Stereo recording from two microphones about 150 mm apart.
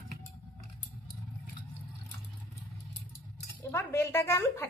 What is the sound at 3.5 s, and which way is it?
Speech, 15° left (ahead or behind).